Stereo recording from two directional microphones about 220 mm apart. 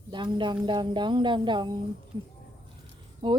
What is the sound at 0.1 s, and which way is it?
Speech, 20° right (ahead or behind).